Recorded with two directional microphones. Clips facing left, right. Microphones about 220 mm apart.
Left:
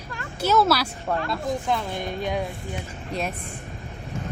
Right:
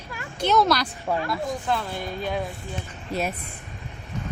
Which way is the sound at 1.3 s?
15° left (ahead or behind).